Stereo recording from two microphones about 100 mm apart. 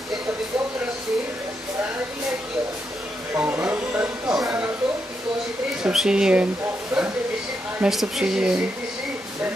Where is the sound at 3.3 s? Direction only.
20° right (ahead or behind).